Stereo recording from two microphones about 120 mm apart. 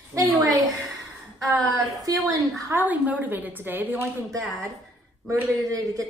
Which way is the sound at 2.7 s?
15° right (ahead or behind).